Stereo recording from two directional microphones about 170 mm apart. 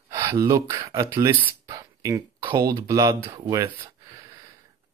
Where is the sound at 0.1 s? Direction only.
20° right (ahead or behind).